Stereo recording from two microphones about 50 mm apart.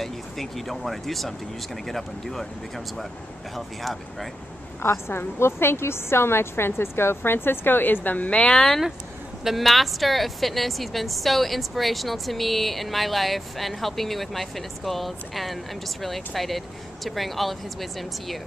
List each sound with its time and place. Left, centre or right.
0.0 s a woman's voice: centre
4.8 s a woman's voice: left
8.3 s speech: left
9.4 s a woman's voice: centre